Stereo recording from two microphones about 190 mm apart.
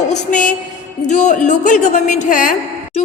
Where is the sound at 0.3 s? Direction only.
40° left (ahead or behind).